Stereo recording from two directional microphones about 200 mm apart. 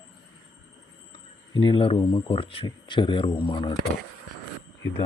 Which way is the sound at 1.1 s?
25° left (ahead or behind).